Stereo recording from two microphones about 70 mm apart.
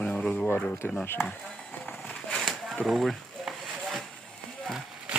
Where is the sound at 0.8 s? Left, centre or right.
Left.